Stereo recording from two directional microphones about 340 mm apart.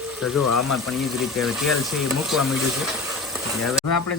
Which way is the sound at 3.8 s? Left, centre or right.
Left.